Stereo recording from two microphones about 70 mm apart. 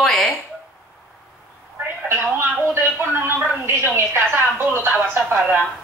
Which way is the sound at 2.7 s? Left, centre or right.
Right.